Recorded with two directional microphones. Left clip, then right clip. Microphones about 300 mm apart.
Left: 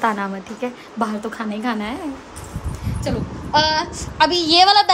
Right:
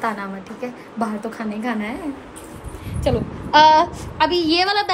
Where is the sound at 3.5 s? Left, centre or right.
Right.